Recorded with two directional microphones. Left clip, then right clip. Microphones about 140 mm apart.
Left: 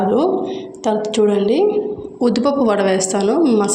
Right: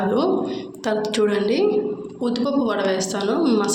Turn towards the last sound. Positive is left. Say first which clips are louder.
# left 5 dB
turn(degrees=30)  # may be behind; listen again after turning